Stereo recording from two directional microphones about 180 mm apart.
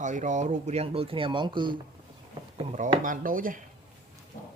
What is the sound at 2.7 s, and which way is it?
Speech, 40° right (ahead or behind).